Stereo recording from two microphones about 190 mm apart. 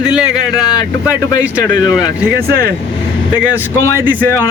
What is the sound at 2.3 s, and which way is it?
Speech, 55° right (ahead or behind).